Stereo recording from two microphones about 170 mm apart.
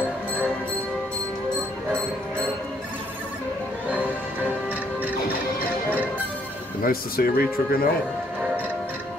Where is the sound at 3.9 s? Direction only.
10° right (ahead or behind).